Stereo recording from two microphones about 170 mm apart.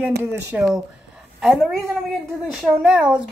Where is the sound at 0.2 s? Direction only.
10° right (ahead or behind).